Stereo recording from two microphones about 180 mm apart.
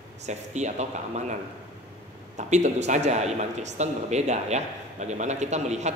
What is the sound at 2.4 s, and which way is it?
A man's voice, 40° right (ahead or behind).